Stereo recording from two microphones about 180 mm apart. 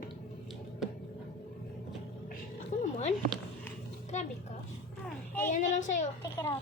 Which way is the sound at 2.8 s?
40° left (ahead or behind).